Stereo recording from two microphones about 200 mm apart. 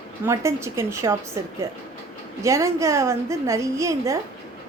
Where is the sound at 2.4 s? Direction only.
15° right (ahead or behind).